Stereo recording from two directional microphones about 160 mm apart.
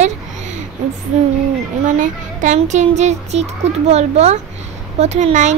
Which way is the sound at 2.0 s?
50° right (ahead or behind).